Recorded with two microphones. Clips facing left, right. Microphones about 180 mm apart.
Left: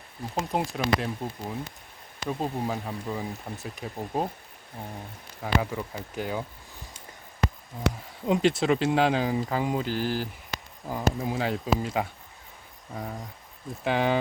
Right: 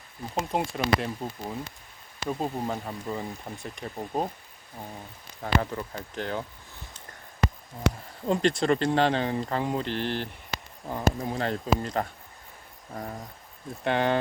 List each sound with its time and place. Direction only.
0.5 s speech: centre (ahead or behind)
5.4 s speech: 10° left (ahead or behind)
7.8 s speech: centre (ahead or behind)